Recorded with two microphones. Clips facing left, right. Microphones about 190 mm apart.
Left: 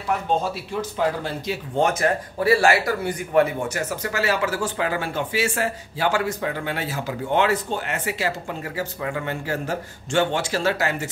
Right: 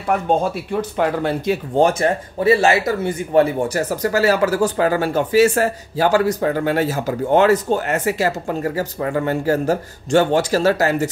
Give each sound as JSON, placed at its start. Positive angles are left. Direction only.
{"t": 0.4, "sound": "speech", "side_deg": -60}
{"t": 1.8, "sound": "speech", "side_deg": -30}